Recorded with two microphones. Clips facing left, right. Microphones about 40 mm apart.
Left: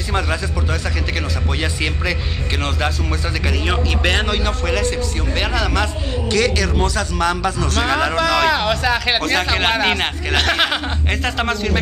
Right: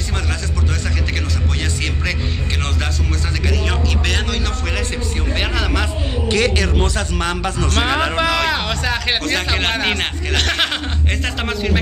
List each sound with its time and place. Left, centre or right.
1.6 s a man's voice: centre
3.4 s a man's voice: centre
5.3 s speech: centre